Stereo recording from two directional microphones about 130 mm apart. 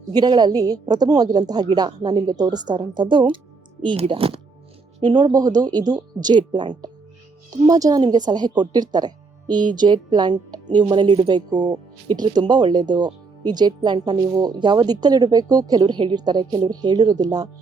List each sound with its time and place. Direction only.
0.1 s a woman's voice: 30° right (ahead or behind)
5.0 s a woman's voice: 35° right (ahead or behind)